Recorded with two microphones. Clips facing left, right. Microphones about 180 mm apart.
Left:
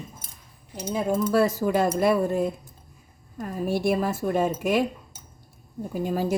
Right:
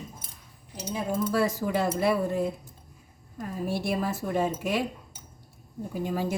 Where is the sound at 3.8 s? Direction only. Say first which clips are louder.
Left 5 dB; 50° left (ahead or behind).